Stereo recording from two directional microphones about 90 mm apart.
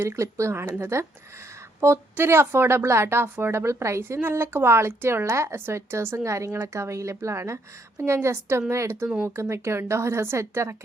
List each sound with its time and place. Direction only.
0.0 s speech: 30° right (ahead or behind)